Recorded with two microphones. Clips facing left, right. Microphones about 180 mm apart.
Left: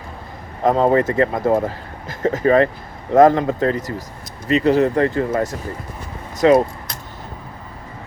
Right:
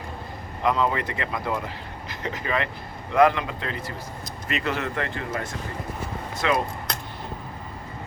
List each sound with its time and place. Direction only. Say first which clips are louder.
0.6 s speech: left 9 dB; 45° left (ahead or behind)